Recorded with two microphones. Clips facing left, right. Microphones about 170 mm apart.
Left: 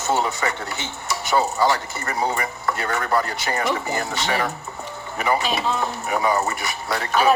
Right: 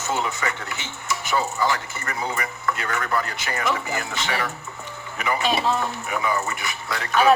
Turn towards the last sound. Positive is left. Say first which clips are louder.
# left 4 dB
turn(degrees=35)  # may be behind; listen again after turning